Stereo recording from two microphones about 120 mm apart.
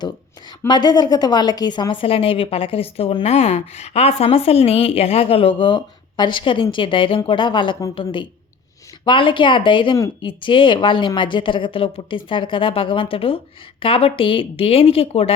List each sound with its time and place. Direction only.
0.7 s a woman's voice: 35° left (ahead or behind)
3.2 s a woman's voice: 60° left (ahead or behind)